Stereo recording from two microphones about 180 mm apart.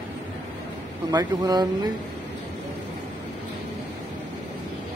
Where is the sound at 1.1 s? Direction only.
20° right (ahead or behind).